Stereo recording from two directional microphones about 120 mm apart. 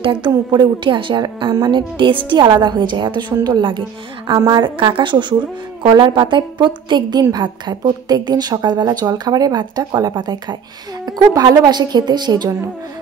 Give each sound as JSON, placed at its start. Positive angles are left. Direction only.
{"t": 0.0, "sound": "a woman's voice", "side_deg": -40}